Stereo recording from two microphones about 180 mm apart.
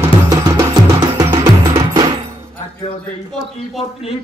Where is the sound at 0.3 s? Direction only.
20° right (ahead or behind).